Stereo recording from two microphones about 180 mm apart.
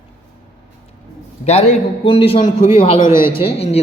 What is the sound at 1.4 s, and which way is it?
Speech, 35° left (ahead or behind).